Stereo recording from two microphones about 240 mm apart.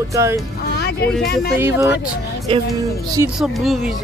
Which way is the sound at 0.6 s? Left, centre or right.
Left.